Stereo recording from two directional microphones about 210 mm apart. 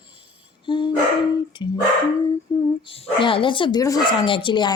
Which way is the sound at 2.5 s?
15° left (ahead or behind).